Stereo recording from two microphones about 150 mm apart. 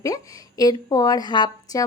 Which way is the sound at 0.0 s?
25° left (ahead or behind).